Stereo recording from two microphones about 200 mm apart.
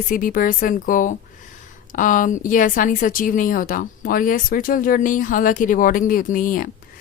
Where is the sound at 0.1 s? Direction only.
45° left (ahead or behind).